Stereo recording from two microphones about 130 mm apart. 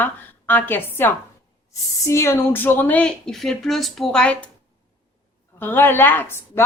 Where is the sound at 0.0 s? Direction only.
15° left (ahead or behind).